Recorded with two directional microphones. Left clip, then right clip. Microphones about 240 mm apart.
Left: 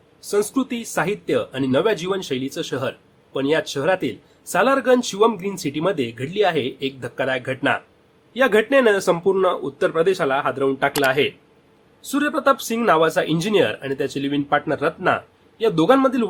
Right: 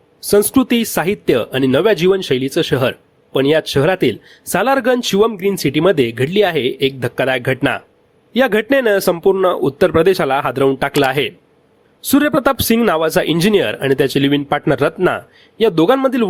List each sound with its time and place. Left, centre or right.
0.3 s speech: right